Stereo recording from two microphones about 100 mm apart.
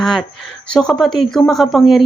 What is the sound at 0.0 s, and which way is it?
Speech, 5° left (ahead or behind).